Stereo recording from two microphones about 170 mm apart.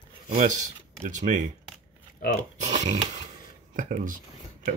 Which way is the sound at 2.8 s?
40° right (ahead or behind).